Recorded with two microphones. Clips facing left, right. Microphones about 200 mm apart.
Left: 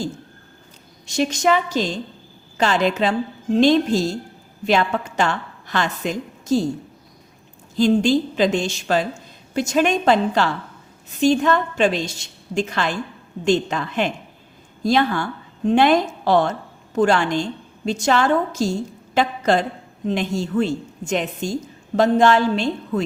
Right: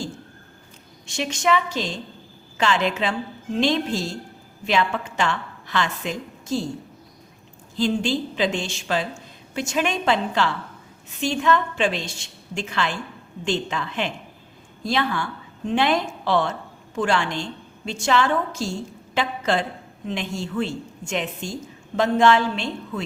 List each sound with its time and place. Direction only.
1.0 s a woman's voice: 40° left (ahead or behind)
7.8 s a woman's voice: 40° left (ahead or behind)